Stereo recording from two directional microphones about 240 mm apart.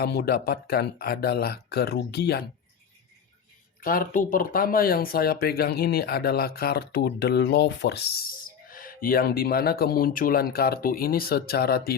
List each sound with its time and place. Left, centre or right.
0.0 s speech: left
3.8 s speech: left